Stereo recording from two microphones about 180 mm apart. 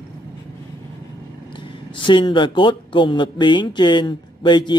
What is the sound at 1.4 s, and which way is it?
Speech, 25° left (ahead or behind).